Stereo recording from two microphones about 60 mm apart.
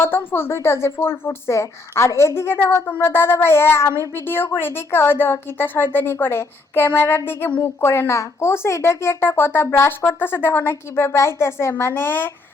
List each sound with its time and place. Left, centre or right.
0.0 s a woman's voice: left